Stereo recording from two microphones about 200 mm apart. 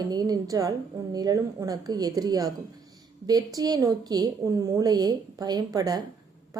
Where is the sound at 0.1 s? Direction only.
20° right (ahead or behind).